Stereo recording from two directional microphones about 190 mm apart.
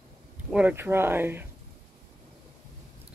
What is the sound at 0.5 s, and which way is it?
Speech, 10° right (ahead or behind).